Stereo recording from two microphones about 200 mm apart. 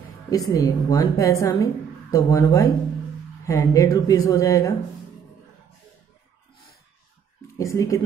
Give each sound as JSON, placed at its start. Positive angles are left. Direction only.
{"t": 0.3, "sound": "a woman's voice", "side_deg": 15}
{"t": 7.5, "sound": "a woman's voice", "side_deg": 15}